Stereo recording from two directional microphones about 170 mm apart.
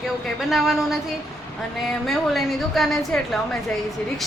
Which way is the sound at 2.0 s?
Centre (ahead or behind).